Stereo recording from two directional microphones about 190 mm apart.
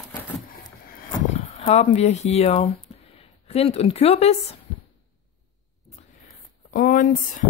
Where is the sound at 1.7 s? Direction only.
35° left (ahead or behind).